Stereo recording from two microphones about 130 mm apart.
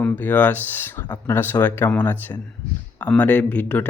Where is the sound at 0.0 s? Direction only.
15° left (ahead or behind).